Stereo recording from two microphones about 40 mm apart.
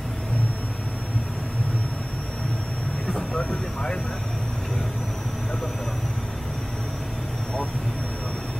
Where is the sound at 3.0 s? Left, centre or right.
Left.